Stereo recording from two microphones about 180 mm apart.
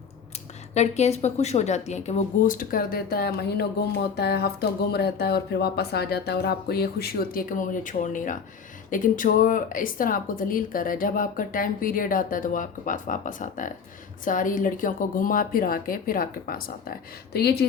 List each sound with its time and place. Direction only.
0.7 s speech: 40° left (ahead or behind); by 17.7 s 65° left (ahead or behind)